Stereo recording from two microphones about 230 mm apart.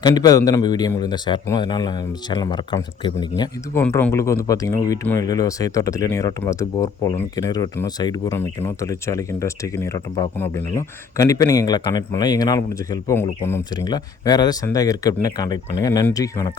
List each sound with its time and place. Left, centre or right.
0.0 s speech: centre